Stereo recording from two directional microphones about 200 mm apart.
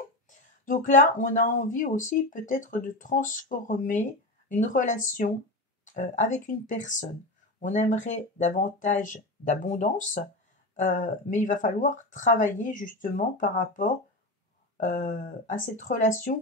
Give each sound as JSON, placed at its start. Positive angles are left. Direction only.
{"t": 0.3, "sound": "speech", "side_deg": 40}